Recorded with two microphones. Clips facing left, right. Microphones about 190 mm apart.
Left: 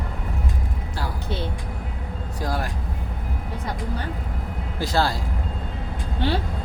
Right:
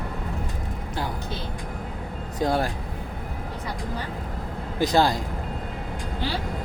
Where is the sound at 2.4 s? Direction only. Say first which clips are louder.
Right 5 dB; 25° right (ahead or behind).